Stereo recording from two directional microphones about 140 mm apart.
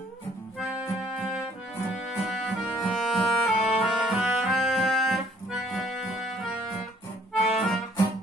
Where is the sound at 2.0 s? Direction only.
Centre (ahead or behind).